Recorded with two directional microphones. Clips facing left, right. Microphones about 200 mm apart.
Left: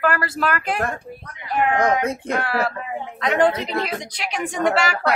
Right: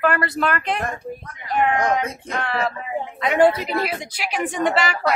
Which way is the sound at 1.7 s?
55° left (ahead or behind).